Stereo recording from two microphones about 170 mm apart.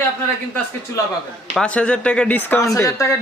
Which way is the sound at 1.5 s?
5° left (ahead or behind).